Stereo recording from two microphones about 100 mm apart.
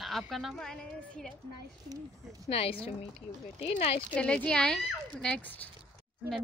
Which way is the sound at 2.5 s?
85° left.